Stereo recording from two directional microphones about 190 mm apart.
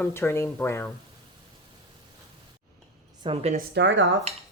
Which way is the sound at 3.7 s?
65° right (ahead or behind).